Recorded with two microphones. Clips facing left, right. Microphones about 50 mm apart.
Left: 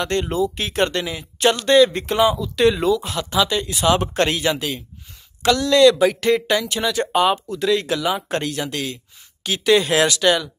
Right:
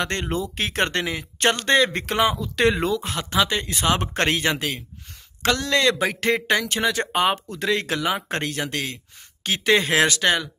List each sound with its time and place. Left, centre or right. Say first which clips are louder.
0.0 s speech: left 5 dB; right